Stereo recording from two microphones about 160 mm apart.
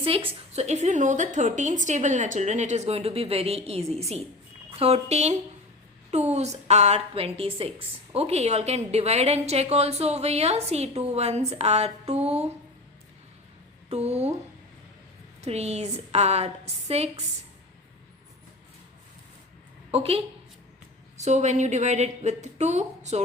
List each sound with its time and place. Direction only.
0.0 s a woman's voice: 35° right (ahead or behind)
13.9 s a woman's voice: 40° right (ahead or behind)
15.4 s a woman's voice: 40° right (ahead or behind)
19.9 s a woman's voice: 40° right (ahead or behind)